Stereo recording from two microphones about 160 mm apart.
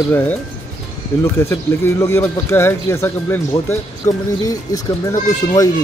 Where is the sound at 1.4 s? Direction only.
15° left (ahead or behind).